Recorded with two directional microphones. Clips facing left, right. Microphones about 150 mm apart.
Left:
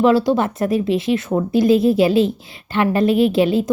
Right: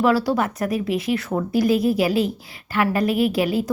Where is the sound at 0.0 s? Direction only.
20° left (ahead or behind).